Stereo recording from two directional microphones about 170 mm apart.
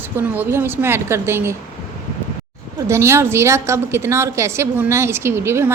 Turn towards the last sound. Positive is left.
turn(degrees=-15)  # may be behind; listen again after turning